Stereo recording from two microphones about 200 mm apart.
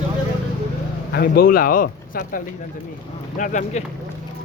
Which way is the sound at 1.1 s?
50° left (ahead or behind).